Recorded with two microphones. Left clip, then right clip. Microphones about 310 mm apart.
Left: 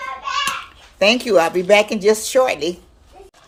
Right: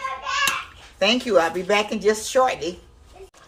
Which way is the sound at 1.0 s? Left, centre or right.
Left.